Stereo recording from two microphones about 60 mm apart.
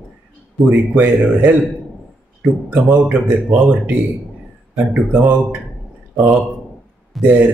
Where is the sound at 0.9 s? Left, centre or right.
Right.